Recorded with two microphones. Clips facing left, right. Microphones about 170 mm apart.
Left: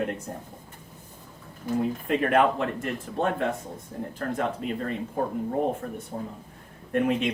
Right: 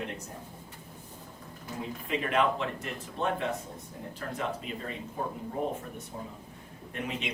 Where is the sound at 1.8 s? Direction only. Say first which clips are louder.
Left 7 dB; 55° left (ahead or behind).